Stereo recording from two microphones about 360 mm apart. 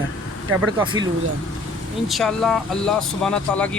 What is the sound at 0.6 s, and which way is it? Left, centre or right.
Speech, centre.